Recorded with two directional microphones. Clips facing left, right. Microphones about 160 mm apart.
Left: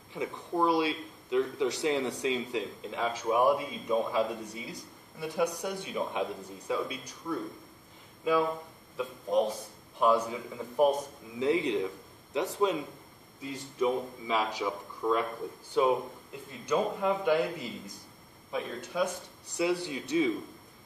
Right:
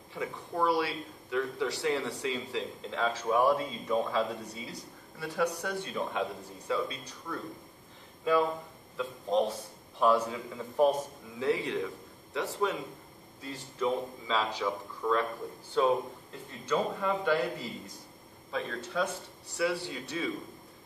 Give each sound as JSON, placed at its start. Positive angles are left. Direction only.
{"t": 0.1, "sound": "speech", "side_deg": 20}
{"t": 9.9, "sound": "a man's voice", "side_deg": 15}